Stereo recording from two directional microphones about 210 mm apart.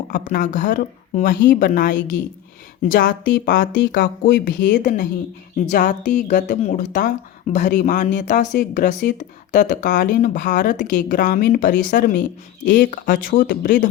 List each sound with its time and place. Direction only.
0.1 s a woman's voice: 40° left (ahead or behind)